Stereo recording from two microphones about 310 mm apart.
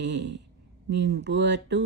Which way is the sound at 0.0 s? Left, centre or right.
Right.